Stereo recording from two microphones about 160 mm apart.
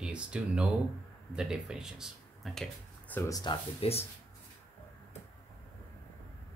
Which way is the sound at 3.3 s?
30° left (ahead or behind).